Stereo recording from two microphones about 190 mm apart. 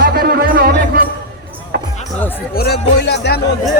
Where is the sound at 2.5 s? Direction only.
55° left (ahead or behind).